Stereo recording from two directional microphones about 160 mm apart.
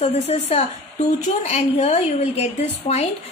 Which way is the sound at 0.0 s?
40° left (ahead or behind).